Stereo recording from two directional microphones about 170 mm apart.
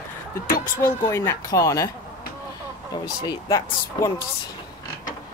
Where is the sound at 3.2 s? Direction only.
20° left (ahead or behind).